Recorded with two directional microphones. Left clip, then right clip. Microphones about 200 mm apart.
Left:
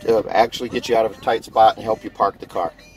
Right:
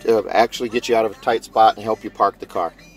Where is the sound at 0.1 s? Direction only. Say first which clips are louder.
Even; 25° right (ahead or behind).